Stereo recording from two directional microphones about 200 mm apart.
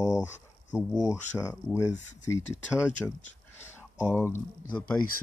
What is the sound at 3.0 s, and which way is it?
Speech, centre (ahead or behind).